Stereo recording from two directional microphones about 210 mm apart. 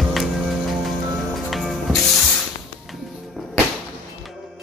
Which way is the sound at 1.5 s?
Centre (ahead or behind).